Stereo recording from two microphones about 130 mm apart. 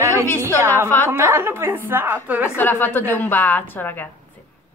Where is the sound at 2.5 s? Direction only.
15° left (ahead or behind).